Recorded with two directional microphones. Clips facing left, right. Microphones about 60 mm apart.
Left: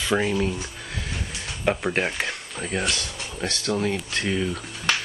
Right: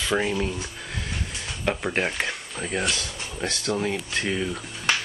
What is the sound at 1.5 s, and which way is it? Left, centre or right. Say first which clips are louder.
Speech: left 3 dB; centre.